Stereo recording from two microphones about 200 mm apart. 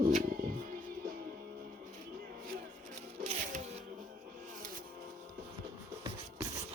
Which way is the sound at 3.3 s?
35° right (ahead or behind).